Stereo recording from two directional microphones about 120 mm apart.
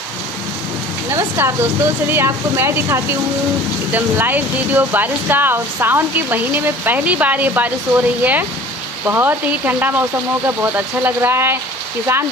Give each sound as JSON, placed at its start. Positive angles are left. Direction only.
{"t": 1.1, "sound": "speech", "side_deg": -20}